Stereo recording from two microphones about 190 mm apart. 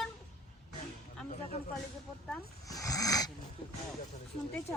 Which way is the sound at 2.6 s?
20° left (ahead or behind).